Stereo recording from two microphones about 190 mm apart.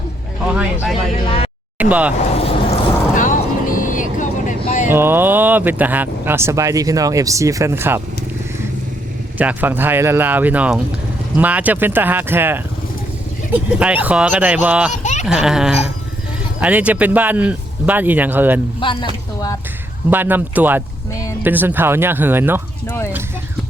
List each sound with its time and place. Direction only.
0.4 s speech: 5° right (ahead or behind)
2.3 s a sound: 30° left (ahead or behind)
3.2 s vehicle: 45° left (ahead or behind)
4.9 s speech: 10° right (ahead or behind)
9.4 s speech: 10° right (ahead or behind)
15.0 s a sound: 40° left (ahead or behind)
15.3 s speech: 5° right (ahead or behind)
18.8 s speech: 25° left (ahead or behind)
20.1 s speech: 10° right (ahead or behind)